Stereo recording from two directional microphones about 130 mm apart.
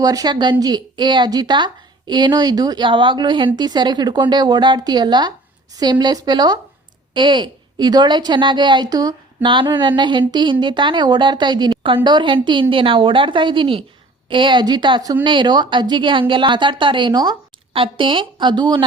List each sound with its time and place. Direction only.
0.0 s a woman's voice: 30° right (ahead or behind)